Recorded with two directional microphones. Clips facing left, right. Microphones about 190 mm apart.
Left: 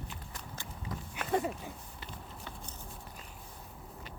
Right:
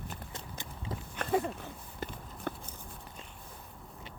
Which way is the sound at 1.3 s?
5° left (ahead or behind).